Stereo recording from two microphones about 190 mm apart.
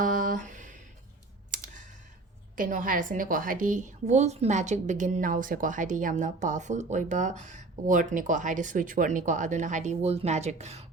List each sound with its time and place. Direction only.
0.0 s a sound: 45° right (ahead or behind)
1.5 s clicking: 45° right (ahead or behind)
2.6 s a woman's voice: 45° right (ahead or behind)